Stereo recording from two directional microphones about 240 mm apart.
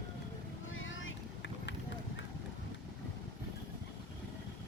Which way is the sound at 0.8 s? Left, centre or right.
Left.